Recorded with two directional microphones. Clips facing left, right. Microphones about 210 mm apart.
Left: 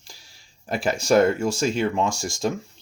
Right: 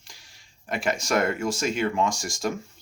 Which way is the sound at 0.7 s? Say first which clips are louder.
Left 5 dB; 30° left (ahead or behind).